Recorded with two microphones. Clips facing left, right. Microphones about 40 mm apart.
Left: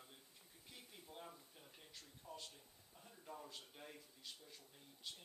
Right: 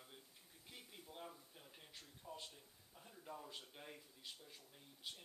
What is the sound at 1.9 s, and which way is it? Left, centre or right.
Speech, centre.